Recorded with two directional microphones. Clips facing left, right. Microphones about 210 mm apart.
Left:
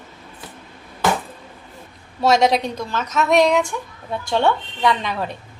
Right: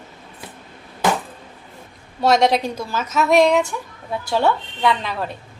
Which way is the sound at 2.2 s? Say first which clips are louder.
Even; centre (ahead or behind).